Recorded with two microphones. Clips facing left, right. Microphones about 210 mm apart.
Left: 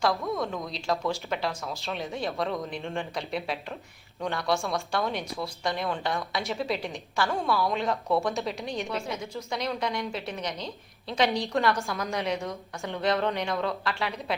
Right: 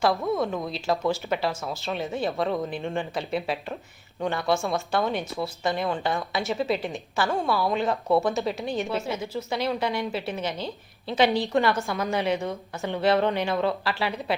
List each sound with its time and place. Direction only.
0.1 s speech: 25° right (ahead or behind)
0.7 s a woman's voice: 5° right (ahead or behind)